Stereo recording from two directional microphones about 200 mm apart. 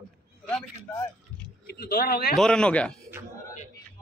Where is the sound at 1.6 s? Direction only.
50° left (ahead or behind).